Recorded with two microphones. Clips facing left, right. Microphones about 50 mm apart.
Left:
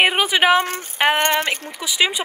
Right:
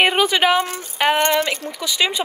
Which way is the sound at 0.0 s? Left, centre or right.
Centre.